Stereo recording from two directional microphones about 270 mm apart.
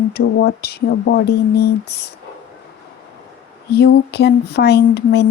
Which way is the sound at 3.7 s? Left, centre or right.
Left.